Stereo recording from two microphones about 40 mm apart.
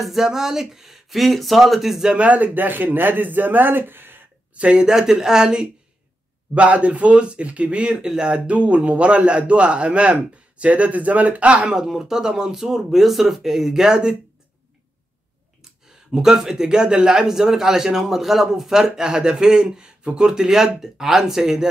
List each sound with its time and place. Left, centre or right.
0.0 s speech: centre
2.1 s a man's voice: right
4.6 s speech: right
4.8 s a man's voice: centre
6.5 s a man's voice: right
11.7 s a man's voice: centre
16.1 s a man's voice: centre